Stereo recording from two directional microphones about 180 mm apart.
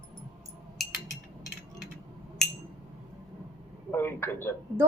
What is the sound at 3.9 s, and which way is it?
Speech, 15° left (ahead or behind).